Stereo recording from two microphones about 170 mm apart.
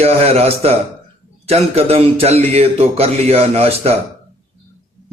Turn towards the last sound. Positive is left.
turn(degrees=-35)  # may be behind; listen again after turning